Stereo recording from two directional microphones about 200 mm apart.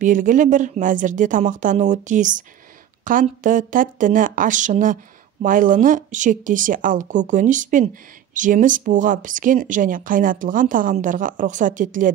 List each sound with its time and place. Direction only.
0.0 s speech: 40° right (ahead or behind)